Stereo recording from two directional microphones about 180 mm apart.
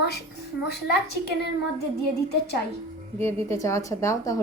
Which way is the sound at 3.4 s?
15° left (ahead or behind).